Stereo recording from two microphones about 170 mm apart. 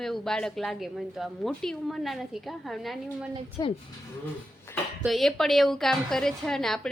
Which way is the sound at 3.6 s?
20° left (ahead or behind).